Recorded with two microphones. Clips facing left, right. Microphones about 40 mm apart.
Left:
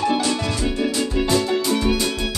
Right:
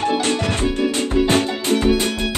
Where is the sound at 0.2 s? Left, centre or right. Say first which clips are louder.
Right 2 dB; right.